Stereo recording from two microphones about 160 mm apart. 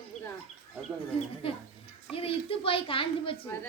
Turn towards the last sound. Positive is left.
turn(degrees=35)  # may be behind; listen again after turning